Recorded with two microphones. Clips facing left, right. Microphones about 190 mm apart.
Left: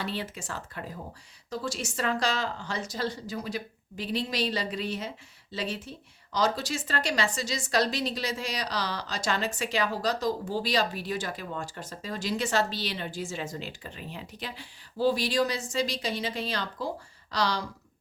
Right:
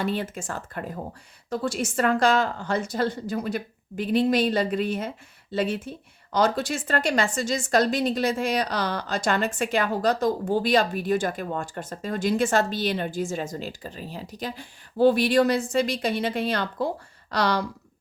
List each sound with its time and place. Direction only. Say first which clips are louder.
0.0 s a woman's voice: right 7 dB; 50° right (ahead or behind)